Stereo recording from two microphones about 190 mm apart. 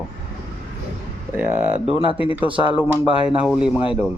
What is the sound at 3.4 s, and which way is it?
Speech, 5° right (ahead or behind).